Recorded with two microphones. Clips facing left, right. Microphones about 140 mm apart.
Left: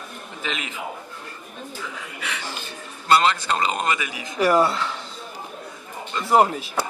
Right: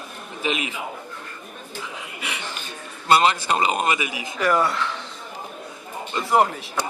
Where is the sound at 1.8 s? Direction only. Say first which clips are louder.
Right 2 dB; 15° right (ahead or behind).